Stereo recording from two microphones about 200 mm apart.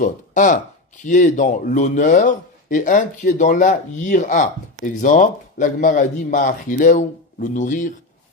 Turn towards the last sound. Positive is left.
turn(degrees=40)  # may be behind; listen again after turning